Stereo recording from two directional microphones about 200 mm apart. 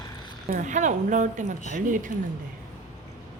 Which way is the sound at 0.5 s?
40° right (ahead or behind).